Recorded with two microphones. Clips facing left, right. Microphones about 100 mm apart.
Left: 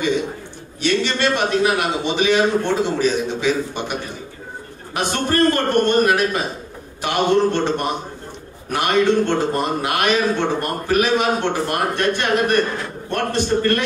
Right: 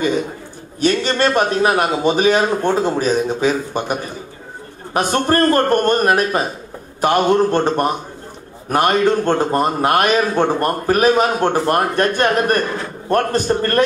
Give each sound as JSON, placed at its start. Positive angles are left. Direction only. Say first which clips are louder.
{"t": 0.7, "sound": "a man's voice", "louder": "right 3 dB", "side_deg": -45}